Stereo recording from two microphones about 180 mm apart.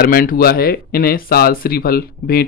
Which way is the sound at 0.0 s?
55° left (ahead or behind).